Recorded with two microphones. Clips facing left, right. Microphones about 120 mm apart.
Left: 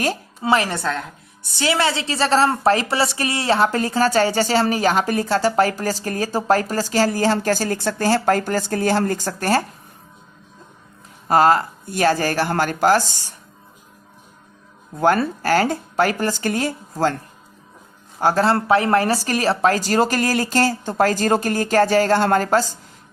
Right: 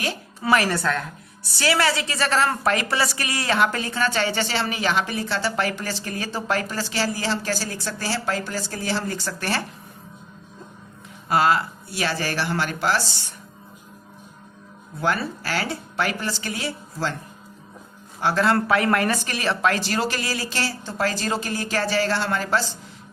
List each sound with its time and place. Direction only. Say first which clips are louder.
0.4 s a woman's voice: left 1 dB; 25° left (ahead or behind); by 9.6 s 40° left (ahead or behind)
11.3 s speech: left 5 dB; 45° left (ahead or behind)
14.9 s speech: left 7 dB; 45° left (ahead or behind)
18.2 s speech: left 3 dB; 40° left (ahead or behind)